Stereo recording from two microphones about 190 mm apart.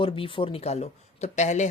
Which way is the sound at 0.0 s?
25° left (ahead or behind).